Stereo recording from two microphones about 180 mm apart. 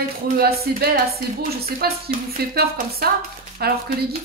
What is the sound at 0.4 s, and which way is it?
Speech, 60° right (ahead or behind).